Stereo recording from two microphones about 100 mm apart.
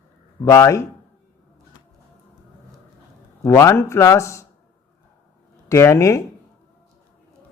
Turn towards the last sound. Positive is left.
turn(degrees=30)  # may be behind; listen again after turning